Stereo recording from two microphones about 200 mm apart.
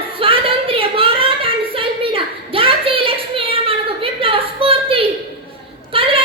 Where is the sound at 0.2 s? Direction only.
25° right (ahead or behind).